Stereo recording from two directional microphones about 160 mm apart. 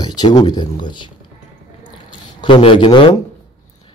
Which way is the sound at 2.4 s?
30° left (ahead or behind).